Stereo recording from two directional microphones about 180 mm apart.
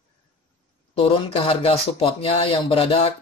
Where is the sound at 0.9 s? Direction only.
30° left (ahead or behind).